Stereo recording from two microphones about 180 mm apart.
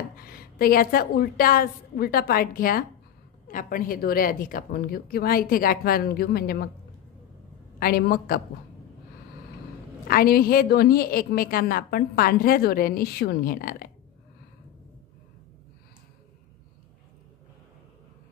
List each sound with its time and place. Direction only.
0.2 s a woman's voice: 55° left (ahead or behind)
7.8 s a woman's voice: 55° left (ahead or behind)
10.0 s a woman's voice: 55° left (ahead or behind)